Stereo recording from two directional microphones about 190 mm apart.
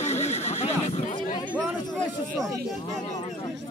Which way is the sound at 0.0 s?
35° left (ahead or behind).